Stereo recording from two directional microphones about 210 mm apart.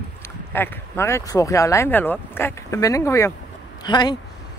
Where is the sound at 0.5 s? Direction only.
10° left (ahead or behind).